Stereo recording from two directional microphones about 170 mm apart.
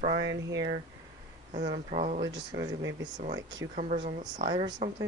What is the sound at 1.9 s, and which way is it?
Speech, 45° right (ahead or behind).